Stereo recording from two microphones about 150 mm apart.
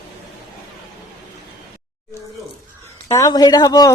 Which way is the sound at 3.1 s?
20° left (ahead or behind).